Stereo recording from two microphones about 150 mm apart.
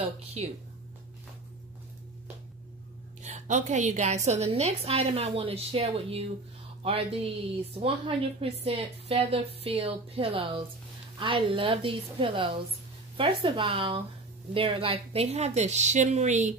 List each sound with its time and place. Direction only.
0.0 s a woman's voice: 45° right (ahead or behind)
3.2 s a woman's voice: 50° right (ahead or behind)